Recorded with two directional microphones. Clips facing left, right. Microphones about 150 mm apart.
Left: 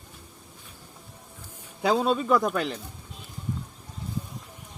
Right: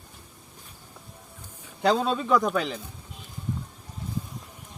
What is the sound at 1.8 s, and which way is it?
Speech, 5° left (ahead or behind).